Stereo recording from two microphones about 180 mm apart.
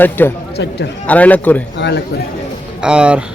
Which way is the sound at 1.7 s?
70° left (ahead or behind).